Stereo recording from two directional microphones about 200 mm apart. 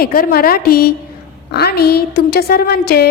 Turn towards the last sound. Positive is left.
turn(degrees=50)  # may be behind; listen again after turning